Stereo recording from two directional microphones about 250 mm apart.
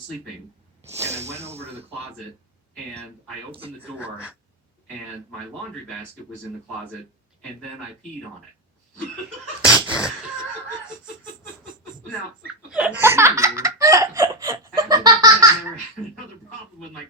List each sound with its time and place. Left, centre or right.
1.0 s speech: right
3.5 s speech: right
3.9 s speech: centre
9.6 s a sound: centre
12.7 s laughter: centre